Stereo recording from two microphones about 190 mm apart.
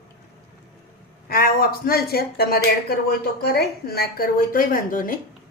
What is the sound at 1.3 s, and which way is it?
Speech, 50° left (ahead or behind).